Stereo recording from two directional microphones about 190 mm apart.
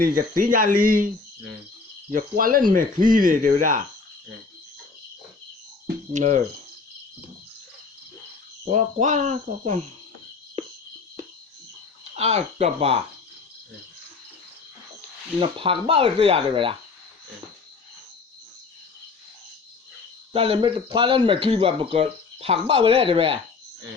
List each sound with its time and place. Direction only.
0.0 s speech: 45° right (ahead or behind)
2.1 s speech: 45° right (ahead or behind)
6.1 s speech: 40° right (ahead or behind)
8.7 s speech: 40° right (ahead or behind)
12.1 s speech: 35° right (ahead or behind)
15.4 s speech: 25° right (ahead or behind)
20.3 s speech: 30° right (ahead or behind)